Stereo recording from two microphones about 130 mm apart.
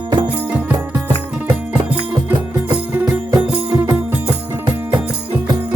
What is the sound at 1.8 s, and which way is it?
Music, 45° right (ahead or behind).